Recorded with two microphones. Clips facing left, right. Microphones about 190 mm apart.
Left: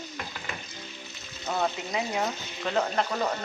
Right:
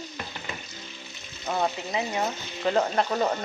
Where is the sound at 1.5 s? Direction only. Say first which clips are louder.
Right 1 dB; 5° right (ahead or behind).